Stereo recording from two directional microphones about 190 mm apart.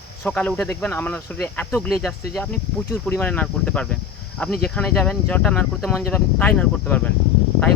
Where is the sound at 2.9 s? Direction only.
10° left (ahead or behind).